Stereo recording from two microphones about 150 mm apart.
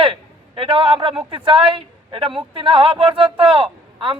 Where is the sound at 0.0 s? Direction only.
35° right (ahead or behind).